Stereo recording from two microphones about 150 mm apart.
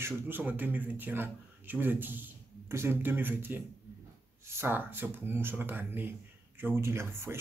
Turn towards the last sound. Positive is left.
turn(degrees=-15)  # may be behind; listen again after turning